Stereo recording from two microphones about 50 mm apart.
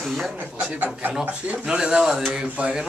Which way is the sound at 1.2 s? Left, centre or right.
Right.